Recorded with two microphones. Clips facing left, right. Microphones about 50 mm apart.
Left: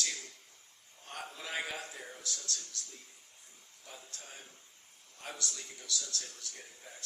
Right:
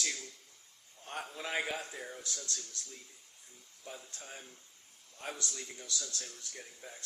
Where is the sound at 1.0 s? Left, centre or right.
Right.